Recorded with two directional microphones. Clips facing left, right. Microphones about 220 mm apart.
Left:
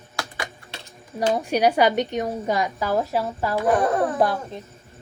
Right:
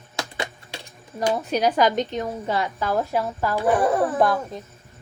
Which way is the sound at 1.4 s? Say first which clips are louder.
Left 2 dB; 10° left (ahead or behind).